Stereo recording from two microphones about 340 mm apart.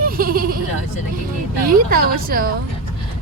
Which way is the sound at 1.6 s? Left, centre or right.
Right.